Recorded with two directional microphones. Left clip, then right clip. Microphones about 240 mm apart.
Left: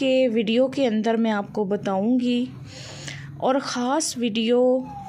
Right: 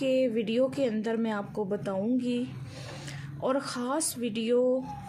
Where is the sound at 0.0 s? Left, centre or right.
Left.